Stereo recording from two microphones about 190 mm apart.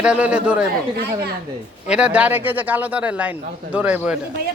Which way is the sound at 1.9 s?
5° right (ahead or behind).